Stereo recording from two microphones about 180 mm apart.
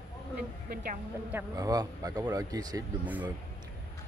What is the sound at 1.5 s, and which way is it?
Speech, 20° right (ahead or behind).